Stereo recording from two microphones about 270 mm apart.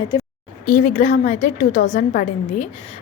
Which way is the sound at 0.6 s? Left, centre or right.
Left.